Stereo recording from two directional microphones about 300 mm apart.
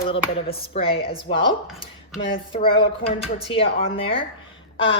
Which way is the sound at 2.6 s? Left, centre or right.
Centre.